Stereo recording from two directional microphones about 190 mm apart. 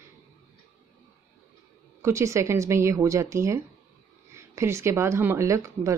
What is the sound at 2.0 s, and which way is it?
Speech, 15° right (ahead or behind).